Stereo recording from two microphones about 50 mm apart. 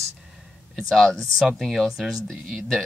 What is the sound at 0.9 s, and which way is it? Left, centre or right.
Speech, centre.